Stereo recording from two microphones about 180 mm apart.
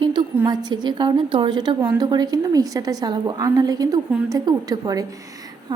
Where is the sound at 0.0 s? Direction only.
25° right (ahead or behind).